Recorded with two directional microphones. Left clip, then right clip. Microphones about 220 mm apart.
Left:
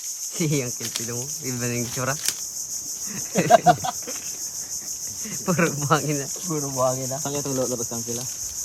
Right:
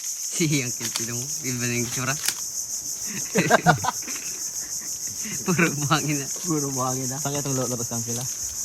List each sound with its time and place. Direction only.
0.3 s a sound: 5° left (ahead or behind)
1.5 s speech: 5° left (ahead or behind)
3.3 s a sound: 10° left (ahead or behind)
5.5 s speech: 5° left (ahead or behind)
6.5 s speech: 25° left (ahead or behind)
7.3 s cricket: 60° right (ahead or behind)